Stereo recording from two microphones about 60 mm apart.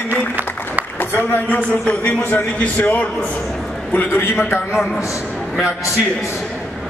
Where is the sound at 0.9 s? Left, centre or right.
Left.